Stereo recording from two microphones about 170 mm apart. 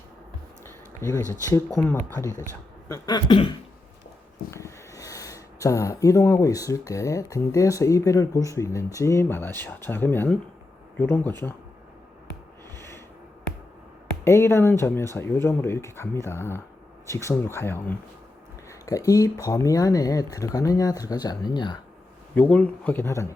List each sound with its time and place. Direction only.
0.6 s a sound: 15° left (ahead or behind)
1.5 s speech: 15° left (ahead or behind)
2.9 s speech: 25° left (ahead or behind)
4.5 s a sound: 20° left (ahead or behind)
5.6 s speech: 20° left (ahead or behind)
12.7 s snort: 15° left (ahead or behind)
14.3 s speech: 15° left (ahead or behind)
22.4 s speech: 10° left (ahead or behind)